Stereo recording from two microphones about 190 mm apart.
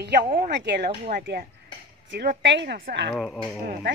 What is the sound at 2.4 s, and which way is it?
Speech, 65° right (ahead or behind).